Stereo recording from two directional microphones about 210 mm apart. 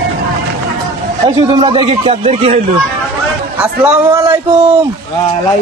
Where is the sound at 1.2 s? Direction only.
20° right (ahead or behind).